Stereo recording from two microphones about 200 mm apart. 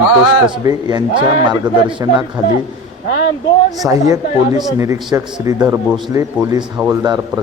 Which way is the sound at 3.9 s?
15° right (ahead or behind).